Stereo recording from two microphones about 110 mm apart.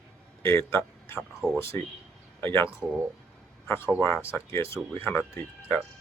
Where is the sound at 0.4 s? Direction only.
25° left (ahead or behind).